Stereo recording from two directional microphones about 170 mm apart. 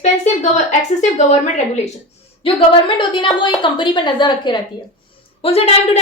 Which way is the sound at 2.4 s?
30° left (ahead or behind).